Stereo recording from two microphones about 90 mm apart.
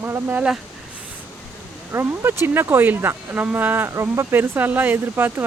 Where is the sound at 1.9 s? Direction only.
25° right (ahead or behind).